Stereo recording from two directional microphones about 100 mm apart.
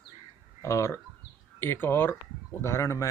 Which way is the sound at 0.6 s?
30° left (ahead or behind).